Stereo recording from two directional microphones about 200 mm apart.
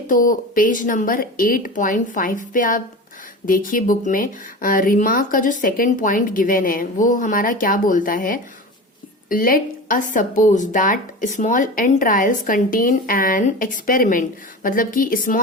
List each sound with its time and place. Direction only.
0.1 s speech: 40° left (ahead or behind)